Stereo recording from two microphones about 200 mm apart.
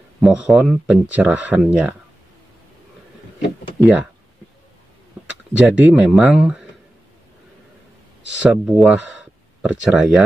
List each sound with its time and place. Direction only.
0.2 s speech: 5° right (ahead or behind)
3.8 s speech: 5° right (ahead or behind)
5.2 s speech: 5° right (ahead or behind)
8.4 s speech: 5° right (ahead or behind)